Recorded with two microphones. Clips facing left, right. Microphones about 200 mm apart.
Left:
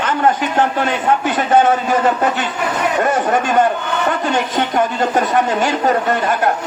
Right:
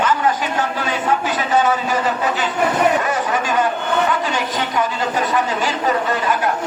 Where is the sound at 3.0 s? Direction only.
50° left (ahead or behind).